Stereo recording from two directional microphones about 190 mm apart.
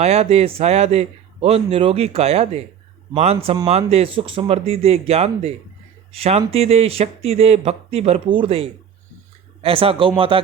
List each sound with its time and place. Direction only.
0.0 s speech: 35° right (ahead or behind)